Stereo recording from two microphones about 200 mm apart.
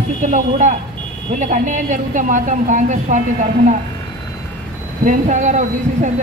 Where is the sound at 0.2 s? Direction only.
40° right (ahead or behind).